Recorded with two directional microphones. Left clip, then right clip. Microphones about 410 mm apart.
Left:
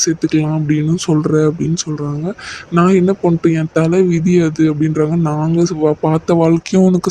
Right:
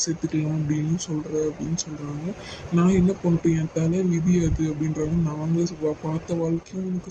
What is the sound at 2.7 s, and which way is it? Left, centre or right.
Speech, left.